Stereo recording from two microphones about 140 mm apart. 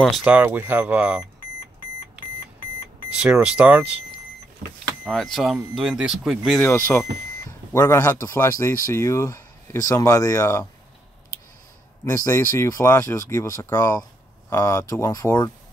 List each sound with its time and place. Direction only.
0.0 s speech: centre (ahead or behind)
3.2 s speech: 10° right (ahead or behind)
5.0 s speech: centre (ahead or behind)
6.7 s speech: 15° left (ahead or behind)
12.0 s speech: 25° left (ahead or behind)